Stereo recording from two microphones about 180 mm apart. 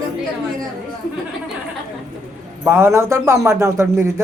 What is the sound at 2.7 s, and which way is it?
Speech, 15° right (ahead or behind).